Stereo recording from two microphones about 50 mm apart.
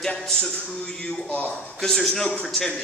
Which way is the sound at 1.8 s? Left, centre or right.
Centre.